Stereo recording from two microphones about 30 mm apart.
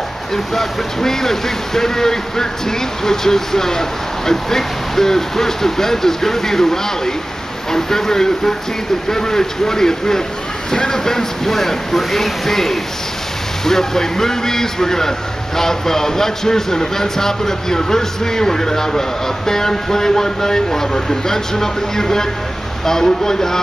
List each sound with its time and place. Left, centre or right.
0.3 s a man's voice: centre